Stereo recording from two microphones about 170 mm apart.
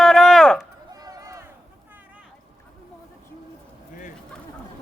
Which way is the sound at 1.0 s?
20° right (ahead or behind).